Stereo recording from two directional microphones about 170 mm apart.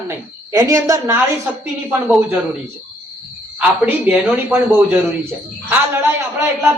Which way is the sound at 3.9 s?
10° right (ahead or behind).